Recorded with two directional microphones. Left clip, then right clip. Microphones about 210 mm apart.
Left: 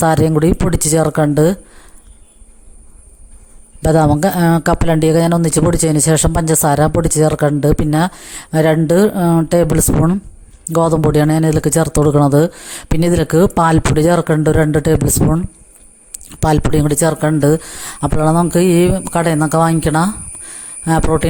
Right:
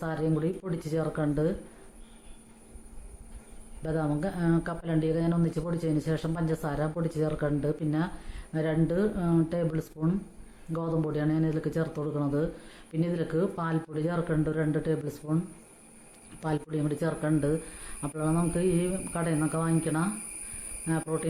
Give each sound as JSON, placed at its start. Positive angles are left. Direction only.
{"t": 0.0, "sound": "speech", "side_deg": 50}
{"t": 3.8, "sound": "speech", "side_deg": 50}